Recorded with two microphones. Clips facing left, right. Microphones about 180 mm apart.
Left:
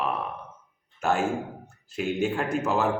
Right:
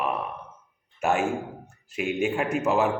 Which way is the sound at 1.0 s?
10° right (ahead or behind).